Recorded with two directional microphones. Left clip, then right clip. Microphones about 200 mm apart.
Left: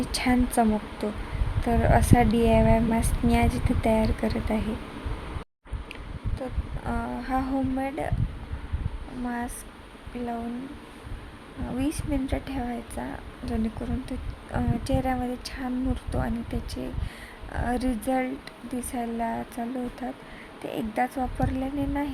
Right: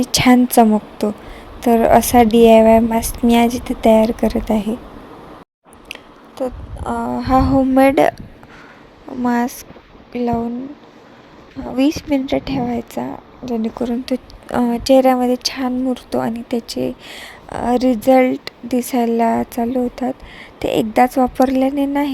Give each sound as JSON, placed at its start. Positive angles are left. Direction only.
{"t": 0.0, "sound": "a woman's voice", "side_deg": -40}
{"t": 5.9, "sound": "a sound", "side_deg": -35}
{"t": 7.8, "sound": "speech", "side_deg": -50}
{"t": 9.2, "sound": "a woman's voice", "side_deg": -40}
{"t": 11.8, "sound": "a woman's voice", "side_deg": -35}